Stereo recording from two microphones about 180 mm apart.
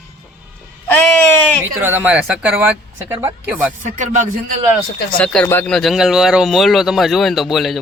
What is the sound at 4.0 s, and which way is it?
Speech, 45° right (ahead or behind).